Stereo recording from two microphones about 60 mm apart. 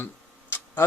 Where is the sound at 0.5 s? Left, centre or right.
Left.